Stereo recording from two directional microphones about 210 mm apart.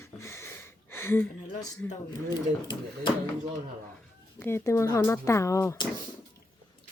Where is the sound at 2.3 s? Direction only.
20° left (ahead or behind).